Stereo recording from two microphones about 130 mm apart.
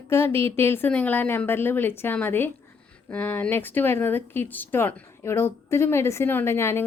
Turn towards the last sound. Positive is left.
turn(degrees=20)  # may be behind; listen again after turning